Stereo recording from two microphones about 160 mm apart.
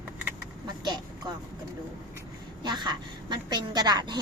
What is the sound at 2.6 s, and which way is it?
A woman's voice, 25° right (ahead or behind).